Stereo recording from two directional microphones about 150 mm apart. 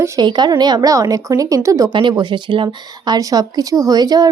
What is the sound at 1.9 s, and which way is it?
Speech, 35° right (ahead or behind).